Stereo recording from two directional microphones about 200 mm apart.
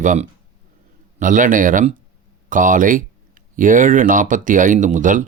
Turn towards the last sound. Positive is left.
turn(degrees=-40)  # may be behind; listen again after turning